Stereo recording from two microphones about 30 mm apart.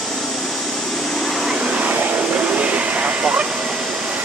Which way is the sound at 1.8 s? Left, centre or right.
Right.